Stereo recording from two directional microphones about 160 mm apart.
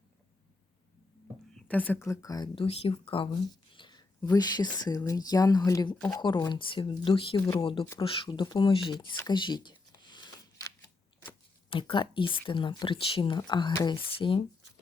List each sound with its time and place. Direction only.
1.5 s speech: 10° left (ahead or behind)
2.6 s speech: 35° left (ahead or behind)
9.2 s a sound: 30° left (ahead or behind)
11.7 s speech: 30° left (ahead or behind)